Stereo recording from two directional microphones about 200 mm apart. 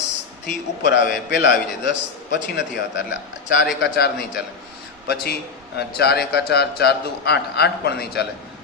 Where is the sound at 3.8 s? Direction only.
55° left (ahead or behind).